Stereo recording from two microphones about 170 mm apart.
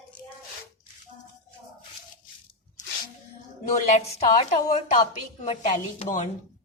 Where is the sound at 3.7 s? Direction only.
40° left (ahead or behind).